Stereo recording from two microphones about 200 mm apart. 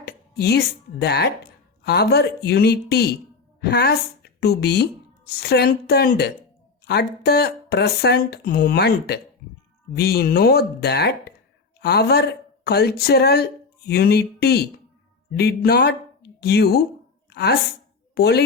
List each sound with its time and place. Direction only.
0.0 s speech: 55° left (ahead or behind)
17.2 s a sound: 55° left (ahead or behind)
18.1 s speech: 55° left (ahead or behind)